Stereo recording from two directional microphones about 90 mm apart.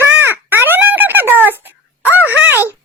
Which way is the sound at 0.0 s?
25° right (ahead or behind).